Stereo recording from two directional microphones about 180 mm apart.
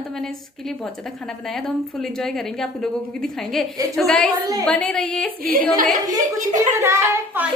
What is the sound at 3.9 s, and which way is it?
A woman's voice, 5° left (ahead or behind).